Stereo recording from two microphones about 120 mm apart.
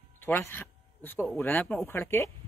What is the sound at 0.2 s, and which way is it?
Speech, 20° left (ahead or behind).